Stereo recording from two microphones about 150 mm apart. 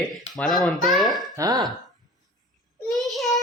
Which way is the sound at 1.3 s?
25° right (ahead or behind).